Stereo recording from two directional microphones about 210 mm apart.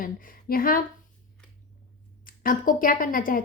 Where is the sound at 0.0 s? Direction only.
40° left (ahead or behind).